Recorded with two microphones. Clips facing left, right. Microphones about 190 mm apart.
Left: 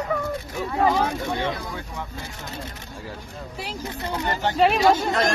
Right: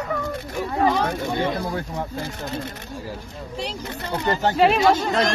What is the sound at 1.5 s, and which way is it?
Speech, 40° right (ahead or behind).